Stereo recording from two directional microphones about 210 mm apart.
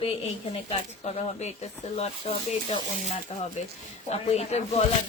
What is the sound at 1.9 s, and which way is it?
Speech, 30° left (ahead or behind).